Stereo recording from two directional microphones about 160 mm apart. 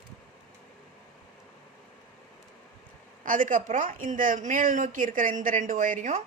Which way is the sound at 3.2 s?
55° right (ahead or behind).